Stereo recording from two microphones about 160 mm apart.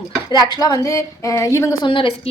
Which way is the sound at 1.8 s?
35° left (ahead or behind).